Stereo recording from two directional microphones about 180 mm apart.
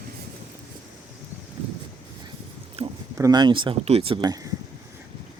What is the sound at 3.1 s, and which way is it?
Speech, 20° right (ahead or behind).